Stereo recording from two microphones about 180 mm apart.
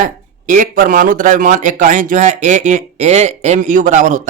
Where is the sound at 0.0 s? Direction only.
45° right (ahead or behind).